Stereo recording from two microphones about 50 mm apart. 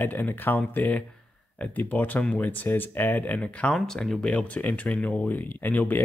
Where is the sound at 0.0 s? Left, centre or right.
Left.